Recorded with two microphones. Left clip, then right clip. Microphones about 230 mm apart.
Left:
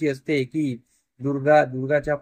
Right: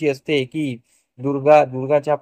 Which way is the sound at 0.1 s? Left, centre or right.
Centre.